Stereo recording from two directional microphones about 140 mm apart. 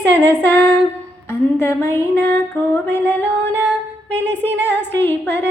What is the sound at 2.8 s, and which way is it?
Music, 15° left (ahead or behind).